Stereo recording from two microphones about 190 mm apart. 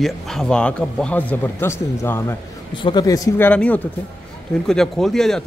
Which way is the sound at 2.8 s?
25° left (ahead or behind).